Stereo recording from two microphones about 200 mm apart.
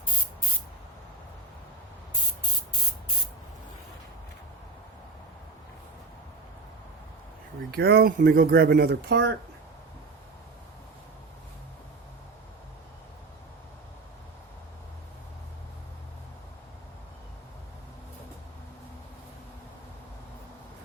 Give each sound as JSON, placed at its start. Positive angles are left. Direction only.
{"t": 7.8, "sound": "speech", "side_deg": -50}